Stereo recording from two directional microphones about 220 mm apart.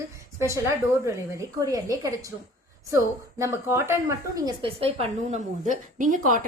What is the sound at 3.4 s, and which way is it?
A woman's voice, 10° right (ahead or behind).